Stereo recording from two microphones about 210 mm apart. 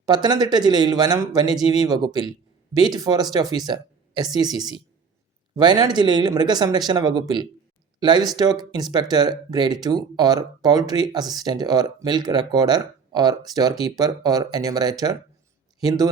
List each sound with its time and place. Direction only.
0.0 s speech: 20° right (ahead or behind)